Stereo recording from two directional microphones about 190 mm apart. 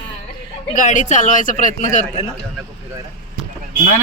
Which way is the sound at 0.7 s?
40° left (ahead or behind).